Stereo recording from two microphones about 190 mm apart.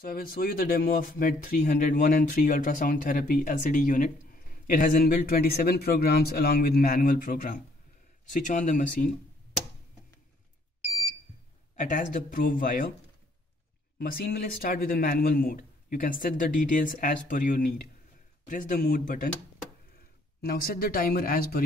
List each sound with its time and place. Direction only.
0.0 s speech: 50° left (ahead or behind)
11.8 s speech: 45° left (ahead or behind)
13.9 s speech: 50° left (ahead or behind)
20.4 s speech: 55° left (ahead or behind)